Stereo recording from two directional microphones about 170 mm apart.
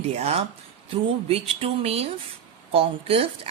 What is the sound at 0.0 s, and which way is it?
Speech, 40° right (ahead or behind).